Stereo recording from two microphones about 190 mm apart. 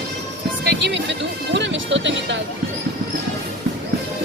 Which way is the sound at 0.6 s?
70° right (ahead or behind).